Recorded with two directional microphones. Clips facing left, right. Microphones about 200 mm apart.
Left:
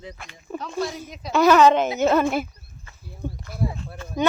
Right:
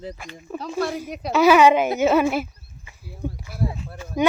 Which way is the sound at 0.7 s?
55° right (ahead or behind).